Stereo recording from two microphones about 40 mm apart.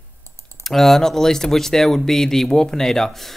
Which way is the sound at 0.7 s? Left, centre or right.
Centre.